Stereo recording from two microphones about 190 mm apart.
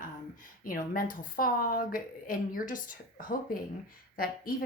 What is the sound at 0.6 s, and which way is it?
Speech, 50° left (ahead or behind).